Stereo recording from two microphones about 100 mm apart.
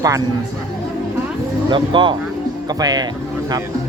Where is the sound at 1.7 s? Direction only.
55° right (ahead or behind).